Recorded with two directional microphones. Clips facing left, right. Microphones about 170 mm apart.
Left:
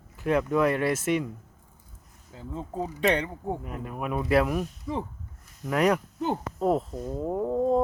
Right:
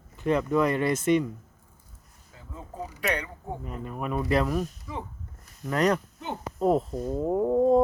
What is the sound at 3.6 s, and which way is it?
Speech, 5° left (ahead or behind).